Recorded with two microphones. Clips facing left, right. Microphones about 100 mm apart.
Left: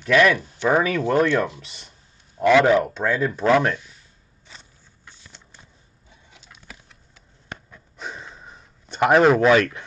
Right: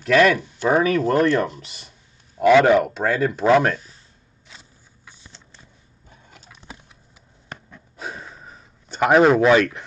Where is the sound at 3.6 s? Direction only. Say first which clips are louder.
Right 2 dB; 35° right (ahead or behind).